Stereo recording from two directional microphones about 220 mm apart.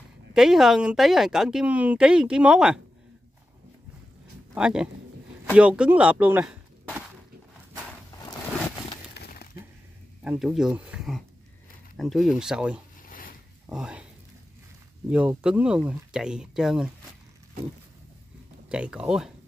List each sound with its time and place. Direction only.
0.3 s speech: centre (ahead or behind)
4.6 s speech: 5° right (ahead or behind)
9.1 s a sound: 45° left (ahead or behind)
10.2 s speech: 5° right (ahead or behind)
13.0 s a sound: 40° left (ahead or behind)
13.7 s speech: 5° right (ahead or behind)
15.0 s speech: 5° right (ahead or behind)
18.7 s speech: 5° right (ahead or behind)